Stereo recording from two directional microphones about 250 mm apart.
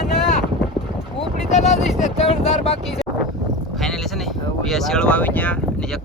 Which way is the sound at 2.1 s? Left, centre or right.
Left.